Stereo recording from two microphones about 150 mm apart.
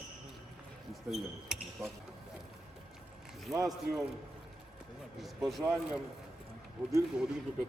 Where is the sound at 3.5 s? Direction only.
25° right (ahead or behind).